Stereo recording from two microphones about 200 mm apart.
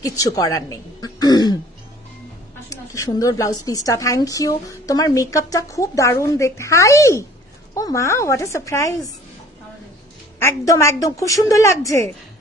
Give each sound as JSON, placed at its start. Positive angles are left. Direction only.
{"t": 0.0, "sound": "a woman's voice", "side_deg": 15}
{"t": 2.7, "sound": "a woman's voice", "side_deg": 15}
{"t": 10.4, "sound": "a woman's voice", "side_deg": 15}